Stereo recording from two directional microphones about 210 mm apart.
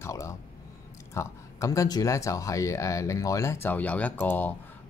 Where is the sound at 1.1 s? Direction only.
15° left (ahead or behind).